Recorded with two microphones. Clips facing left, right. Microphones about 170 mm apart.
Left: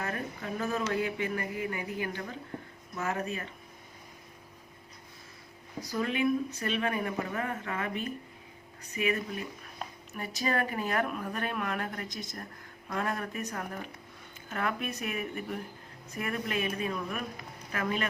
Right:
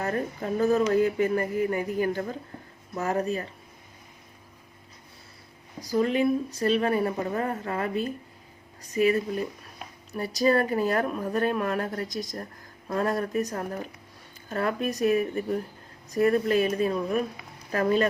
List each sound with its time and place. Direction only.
0.0 s speech: 35° right (ahead or behind)
5.9 s speech: 35° right (ahead or behind)